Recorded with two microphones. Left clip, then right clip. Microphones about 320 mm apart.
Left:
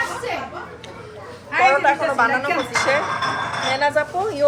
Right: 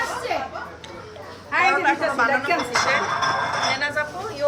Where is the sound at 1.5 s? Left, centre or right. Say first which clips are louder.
Left 3 dB; right.